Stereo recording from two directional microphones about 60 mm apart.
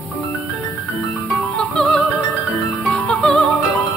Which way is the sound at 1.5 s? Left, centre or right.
Centre.